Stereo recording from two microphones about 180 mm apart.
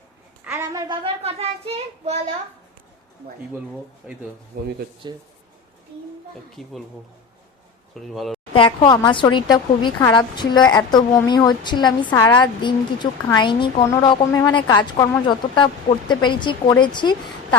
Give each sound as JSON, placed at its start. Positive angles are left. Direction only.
{"t": 0.4, "sound": "child singing", "side_deg": -15}
{"t": 4.0, "sound": "speech", "side_deg": -5}
{"t": 4.5, "sound": "speech", "side_deg": -50}
{"t": 5.0, "sound": "speech", "side_deg": -25}
{"t": 6.6, "sound": "speech", "side_deg": 0}
{"t": 7.9, "sound": "speech", "side_deg": 0}
{"t": 8.5, "sound": "a woman's voice", "side_deg": 25}
{"t": 13.8, "sound": "a woman's voice", "side_deg": 15}